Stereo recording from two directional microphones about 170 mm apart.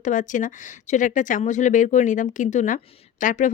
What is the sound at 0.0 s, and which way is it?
Speech, 50° left (ahead or behind).